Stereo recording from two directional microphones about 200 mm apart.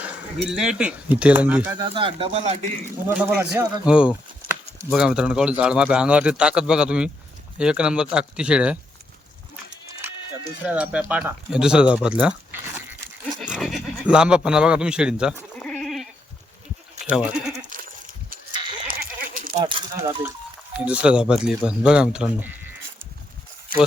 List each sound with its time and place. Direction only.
0.0 s speech: 5° right (ahead or behind)
1.7 s speech: 25° right (ahead or behind)
3.1 s speech: 10° right (ahead or behind)
10.6 s speech: 5° right (ahead or behind)
13.6 s bleat: centre (ahead or behind)
17.0 s speech: 5° right (ahead or behind)
18.9 s bleat: 45° right (ahead or behind)
19.6 s speech: 25° right (ahead or behind); by 22.4 s 5° right (ahead or behind)